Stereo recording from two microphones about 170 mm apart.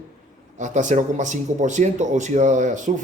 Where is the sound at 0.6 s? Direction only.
45° right (ahead or behind).